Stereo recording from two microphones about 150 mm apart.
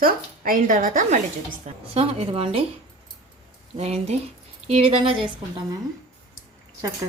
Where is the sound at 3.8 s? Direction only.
45° right (ahead or behind).